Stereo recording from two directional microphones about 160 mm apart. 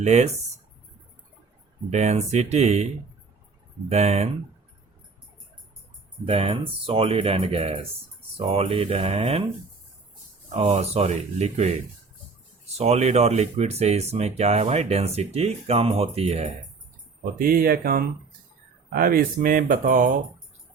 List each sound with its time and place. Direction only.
0.0 s speech: 45° right (ahead or behind)
1.9 s speech: 45° right (ahead or behind)
6.2 s speech: 35° right (ahead or behind)
10.5 s speech: 45° right (ahead or behind)
17.3 s speech: 65° right (ahead or behind)